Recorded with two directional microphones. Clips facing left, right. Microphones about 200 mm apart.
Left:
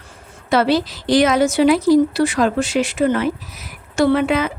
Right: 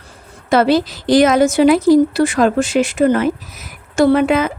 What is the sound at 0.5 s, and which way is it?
Speech, 50° right (ahead or behind).